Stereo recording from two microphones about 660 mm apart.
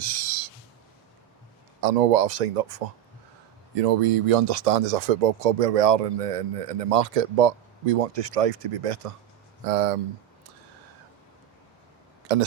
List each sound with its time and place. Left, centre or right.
0.0 s a sound: right
1.8 s speech: right
3.8 s speech: right
9.6 s speech: right
12.3 s speech: right